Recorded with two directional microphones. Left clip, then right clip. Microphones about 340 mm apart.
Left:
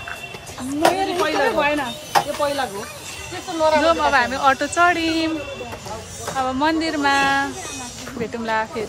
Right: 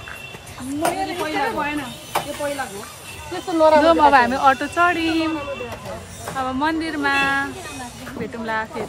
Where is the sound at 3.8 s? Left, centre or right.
Centre.